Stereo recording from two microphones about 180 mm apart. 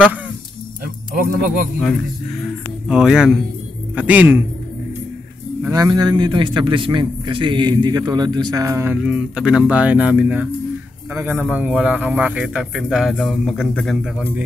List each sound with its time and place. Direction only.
1.1 s speech: 55° right (ahead or behind)
2.9 s a man's voice: 5° right (ahead or behind)
5.6 s a man's voice: 20° right (ahead or behind); by 14.2 s 5° left (ahead or behind)